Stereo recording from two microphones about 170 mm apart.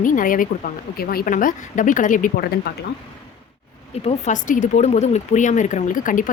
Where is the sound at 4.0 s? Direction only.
40° left (ahead or behind).